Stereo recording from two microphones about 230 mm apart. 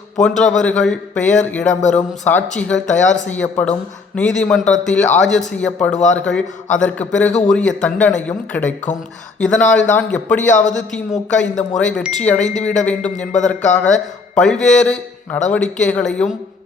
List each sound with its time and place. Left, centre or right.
0.2 s speech: centre
10.5 s a man's voice: left
11.3 s speech: centre